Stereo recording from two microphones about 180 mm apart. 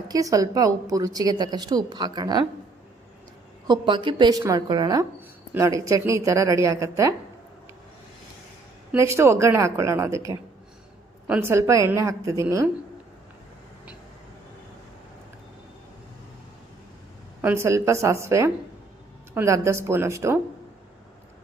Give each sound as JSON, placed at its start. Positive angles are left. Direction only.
{"t": 0.1, "sound": "a woman's voice", "side_deg": -20}
{"t": 3.7, "sound": "a woman's voice", "side_deg": -25}
{"t": 8.9, "sound": "a woman's voice", "side_deg": -15}
{"t": 17.4, "sound": "a woman's voice", "side_deg": -15}